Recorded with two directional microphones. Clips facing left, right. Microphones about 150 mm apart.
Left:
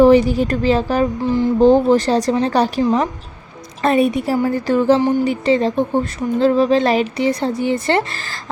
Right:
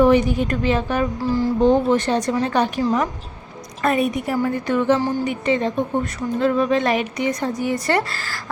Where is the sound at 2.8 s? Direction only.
25° left (ahead or behind).